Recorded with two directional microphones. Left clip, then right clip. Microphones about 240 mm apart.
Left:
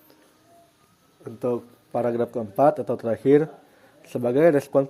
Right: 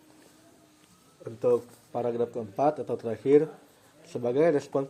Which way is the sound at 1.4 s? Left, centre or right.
Left.